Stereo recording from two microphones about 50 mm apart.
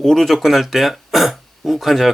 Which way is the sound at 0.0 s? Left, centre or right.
Centre.